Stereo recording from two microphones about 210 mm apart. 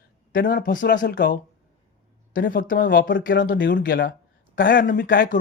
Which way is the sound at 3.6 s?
55° left (ahead or behind).